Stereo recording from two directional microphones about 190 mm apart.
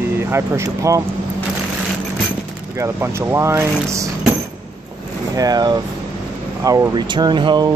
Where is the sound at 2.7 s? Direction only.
15° right (ahead or behind).